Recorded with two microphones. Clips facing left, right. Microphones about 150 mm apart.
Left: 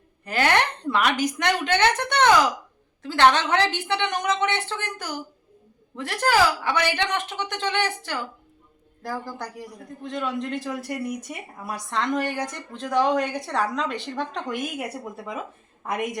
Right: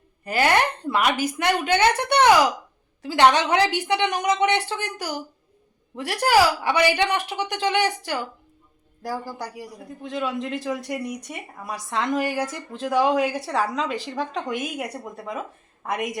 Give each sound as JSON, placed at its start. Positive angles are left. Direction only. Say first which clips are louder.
{"t": 0.3, "sound": "a woman's voice", "louder": "right 2 dB", "side_deg": -10}